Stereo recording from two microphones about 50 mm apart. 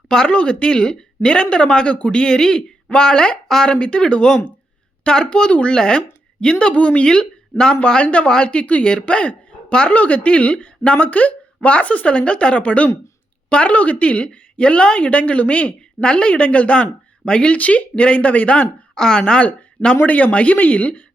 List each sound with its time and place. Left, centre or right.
0.1 s a woman's voice: centre
18.9 s speech: centre
19.2 s a woman's voice: left